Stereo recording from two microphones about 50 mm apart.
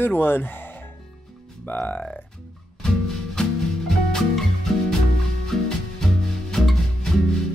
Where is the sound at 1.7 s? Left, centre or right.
Left.